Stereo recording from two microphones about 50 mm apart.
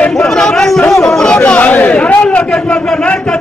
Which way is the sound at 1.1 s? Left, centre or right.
Centre.